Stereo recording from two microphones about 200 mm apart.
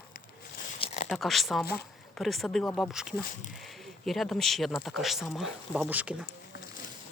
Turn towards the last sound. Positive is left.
turn(degrees=-5)  # may be behind; listen again after turning